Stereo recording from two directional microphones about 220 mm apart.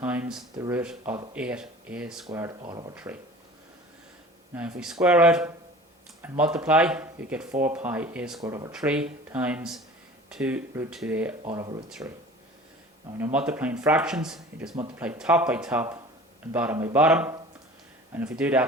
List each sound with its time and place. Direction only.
0.0 s speech: 5° right (ahead or behind)
0.5 s speech: 15° right (ahead or behind)
0.8 s speech: 5° right (ahead or behind)
2.6 s speech: 20° right (ahead or behind)
2.9 s speech: 5° right (ahead or behind)
4.5 s speech: 5° right (ahead or behind)
11.5 s speech: 20° right (ahead or behind)
11.9 s speech: centre (ahead or behind)
13.1 s speech: 10° right (ahead or behind)